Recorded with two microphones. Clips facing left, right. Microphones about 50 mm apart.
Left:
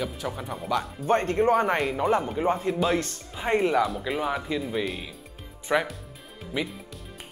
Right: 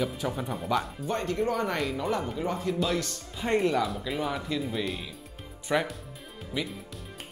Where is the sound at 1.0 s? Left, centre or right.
Left.